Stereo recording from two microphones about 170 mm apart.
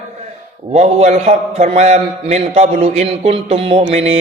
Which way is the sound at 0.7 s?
40° right (ahead or behind).